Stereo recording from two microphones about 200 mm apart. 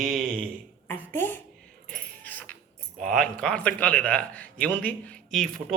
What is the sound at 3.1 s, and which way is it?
A man's voice, 5° left (ahead or behind).